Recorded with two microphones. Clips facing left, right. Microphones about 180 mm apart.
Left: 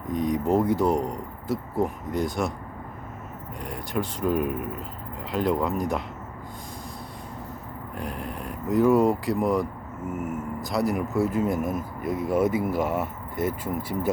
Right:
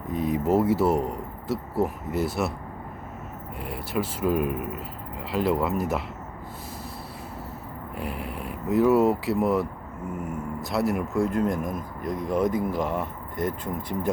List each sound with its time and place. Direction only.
0.1 s speech: 5° right (ahead or behind)
3.6 s speech: 5° right (ahead or behind)
7.9 s speech: 5° right (ahead or behind)